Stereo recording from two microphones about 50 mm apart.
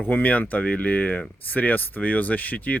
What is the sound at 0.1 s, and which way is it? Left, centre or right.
Speech, left.